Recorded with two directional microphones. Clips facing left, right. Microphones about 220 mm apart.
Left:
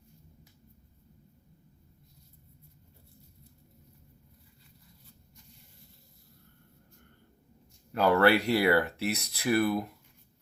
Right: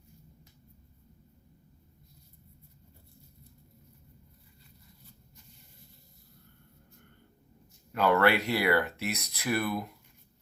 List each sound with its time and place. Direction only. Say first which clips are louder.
7.9 s speech: left 2 dB; 35° left (ahead or behind)